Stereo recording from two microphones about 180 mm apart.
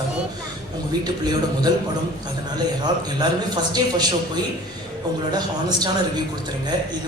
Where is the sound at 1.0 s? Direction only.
20° right (ahead or behind).